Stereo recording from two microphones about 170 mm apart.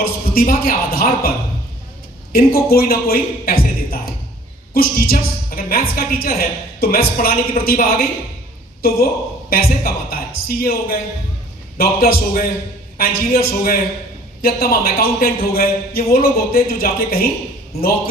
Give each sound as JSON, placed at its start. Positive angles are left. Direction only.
{"t": 0.0, "sound": "a woman's voice", "side_deg": 60}
{"t": 2.3, "sound": "a woman's voice", "side_deg": 60}
{"t": 9.5, "sound": "a woman's voice", "side_deg": 60}